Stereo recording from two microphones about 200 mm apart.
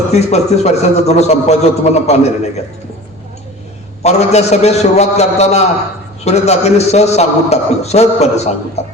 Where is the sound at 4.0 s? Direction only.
35° left (ahead or behind).